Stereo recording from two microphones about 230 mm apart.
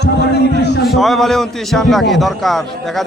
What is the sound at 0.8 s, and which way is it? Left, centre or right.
Speech, centre.